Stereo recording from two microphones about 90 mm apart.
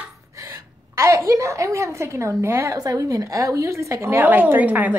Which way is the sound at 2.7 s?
45° right (ahead or behind).